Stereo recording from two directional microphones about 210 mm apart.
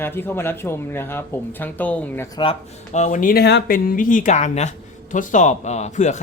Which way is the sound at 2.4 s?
30° left (ahead or behind).